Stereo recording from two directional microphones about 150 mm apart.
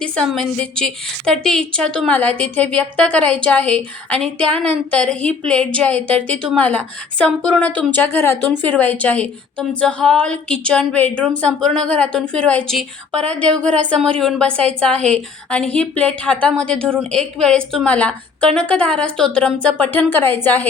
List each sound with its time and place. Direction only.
0.2 s a woman's voice: 5° left (ahead or behind)